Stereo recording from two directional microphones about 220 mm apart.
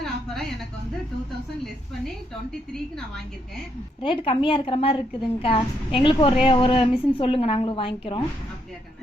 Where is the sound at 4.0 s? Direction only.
25° left (ahead or behind).